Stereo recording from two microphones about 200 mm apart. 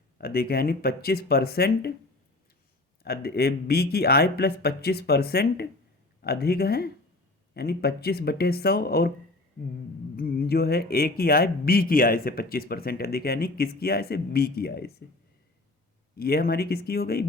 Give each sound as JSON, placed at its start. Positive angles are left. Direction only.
{"t": 0.2, "sound": "speech", "side_deg": 50}
{"t": 3.0, "sound": "speech", "side_deg": 50}
{"t": 10.2, "sound": "speech", "side_deg": 50}
{"t": 16.1, "sound": "speech", "side_deg": 50}